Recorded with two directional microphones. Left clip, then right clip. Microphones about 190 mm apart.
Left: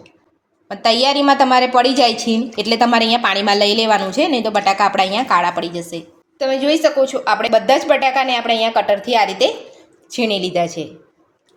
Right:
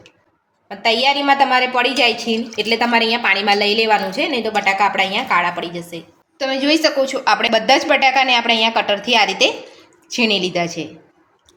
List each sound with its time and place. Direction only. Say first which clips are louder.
0.7 s a woman's voice: left 1 dB; 40° left (ahead or behind)
6.4 s a woman's voice: left 1 dB; 15° left (ahead or behind)